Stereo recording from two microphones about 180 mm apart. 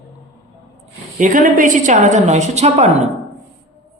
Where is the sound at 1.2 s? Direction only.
50° right (ahead or behind).